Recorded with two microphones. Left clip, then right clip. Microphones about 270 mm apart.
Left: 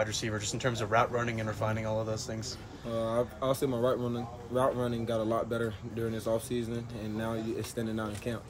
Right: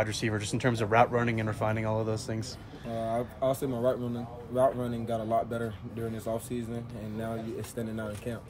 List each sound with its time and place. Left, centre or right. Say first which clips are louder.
0.0 s speech: right 2 dB; right
3.0 s speech: right 1 dB; centre